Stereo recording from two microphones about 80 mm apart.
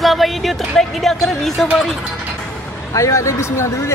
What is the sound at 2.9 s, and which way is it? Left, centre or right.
A man's voice, left.